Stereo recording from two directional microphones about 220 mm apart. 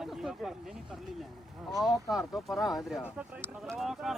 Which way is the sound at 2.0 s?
Centre (ahead or behind).